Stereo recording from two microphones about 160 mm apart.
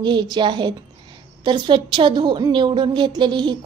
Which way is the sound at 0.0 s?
30° right (ahead or behind).